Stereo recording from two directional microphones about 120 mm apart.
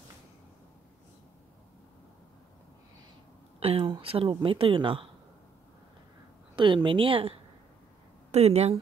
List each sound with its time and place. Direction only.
3.5 s speech: 55° right (ahead or behind)
6.5 s speech: 45° right (ahead or behind)
8.3 s speech: 65° right (ahead or behind)